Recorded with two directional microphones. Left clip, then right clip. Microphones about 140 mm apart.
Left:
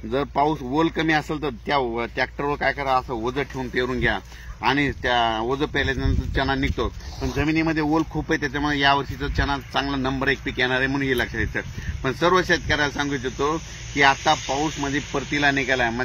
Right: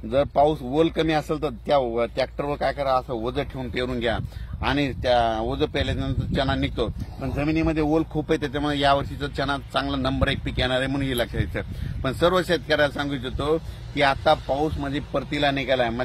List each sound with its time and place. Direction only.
0.1 s speech: 70° right (ahead or behind)